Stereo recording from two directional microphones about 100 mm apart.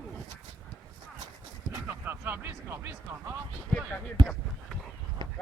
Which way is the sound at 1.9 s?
20° right (ahead or behind).